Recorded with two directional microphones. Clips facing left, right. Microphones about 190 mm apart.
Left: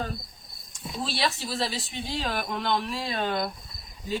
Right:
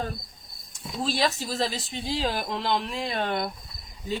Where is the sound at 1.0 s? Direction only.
45° right (ahead or behind); by 2.9 s 25° right (ahead or behind).